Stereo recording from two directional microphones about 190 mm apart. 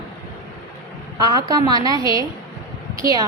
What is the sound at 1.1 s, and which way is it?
Speech, 20° right (ahead or behind).